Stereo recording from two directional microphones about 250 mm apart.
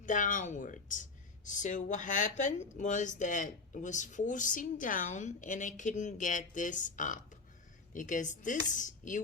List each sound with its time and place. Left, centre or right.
0.0 s speech: left